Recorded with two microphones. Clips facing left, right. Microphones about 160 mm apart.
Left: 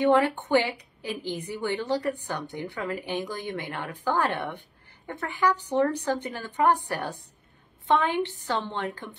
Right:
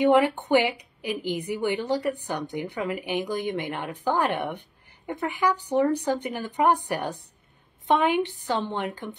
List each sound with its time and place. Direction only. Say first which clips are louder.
0.0 s a woman's voice: right 2 dB; 15° right (ahead or behind)